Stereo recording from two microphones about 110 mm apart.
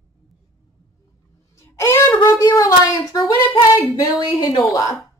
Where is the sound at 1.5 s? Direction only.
25° left (ahead or behind).